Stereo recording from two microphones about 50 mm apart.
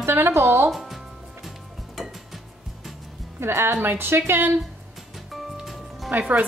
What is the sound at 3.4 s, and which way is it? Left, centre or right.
A woman's voice, right.